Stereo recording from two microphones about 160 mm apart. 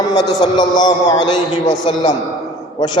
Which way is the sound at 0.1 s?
25° left (ahead or behind).